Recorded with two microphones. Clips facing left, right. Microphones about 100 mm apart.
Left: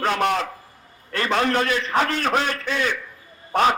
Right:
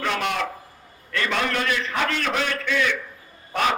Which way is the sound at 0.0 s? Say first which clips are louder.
Left 4 dB; 40° left (ahead or behind).